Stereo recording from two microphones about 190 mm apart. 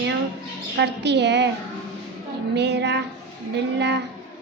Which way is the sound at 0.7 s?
65° right (ahead or behind).